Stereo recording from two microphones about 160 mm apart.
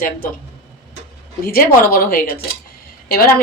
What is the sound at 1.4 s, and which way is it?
A woman's voice, 65° left (ahead or behind).